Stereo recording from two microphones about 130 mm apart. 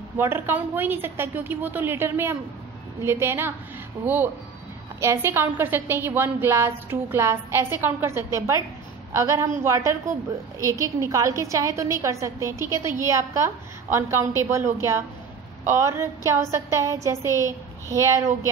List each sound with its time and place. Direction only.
0.2 s a woman's voice: 15° right (ahead or behind)